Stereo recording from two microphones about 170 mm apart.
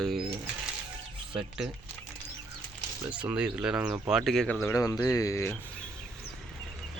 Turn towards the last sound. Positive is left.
turn(degrees=15)  # may be behind; listen again after turning